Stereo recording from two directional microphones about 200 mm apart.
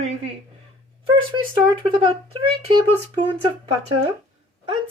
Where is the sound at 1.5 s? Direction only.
25° right (ahead or behind).